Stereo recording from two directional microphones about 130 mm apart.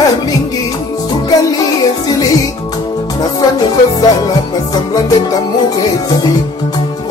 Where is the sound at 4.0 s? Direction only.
30° left (ahead or behind).